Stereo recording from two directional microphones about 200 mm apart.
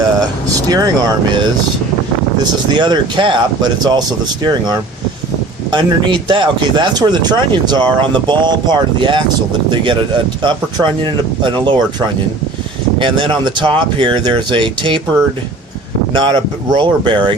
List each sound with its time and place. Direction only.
0.7 s speech: 20° right (ahead or behind)
16.1 s speech: 20° right (ahead or behind)